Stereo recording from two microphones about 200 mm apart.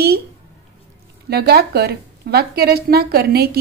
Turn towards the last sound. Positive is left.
turn(degrees=-50)  # may be behind; listen again after turning